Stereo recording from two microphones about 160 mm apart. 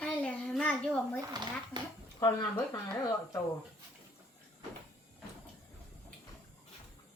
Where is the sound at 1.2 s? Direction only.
25° right (ahead or behind).